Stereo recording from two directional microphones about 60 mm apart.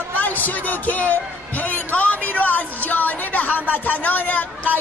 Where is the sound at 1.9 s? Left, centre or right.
Left.